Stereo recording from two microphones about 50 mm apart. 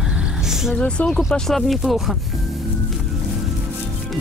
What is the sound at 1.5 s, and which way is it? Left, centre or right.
Speech, centre.